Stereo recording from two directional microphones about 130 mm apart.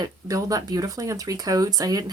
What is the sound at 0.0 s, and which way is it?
Speech, 25° right (ahead or behind).